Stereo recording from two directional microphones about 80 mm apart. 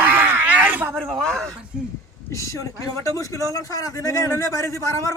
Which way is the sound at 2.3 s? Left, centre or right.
Left.